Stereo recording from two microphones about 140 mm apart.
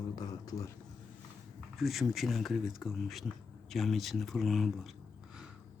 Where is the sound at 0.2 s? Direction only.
25° left (ahead or behind).